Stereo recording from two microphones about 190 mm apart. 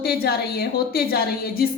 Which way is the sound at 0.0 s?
55° left (ahead or behind).